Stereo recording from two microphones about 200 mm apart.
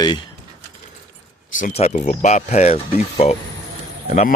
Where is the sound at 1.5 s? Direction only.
40° left (ahead or behind).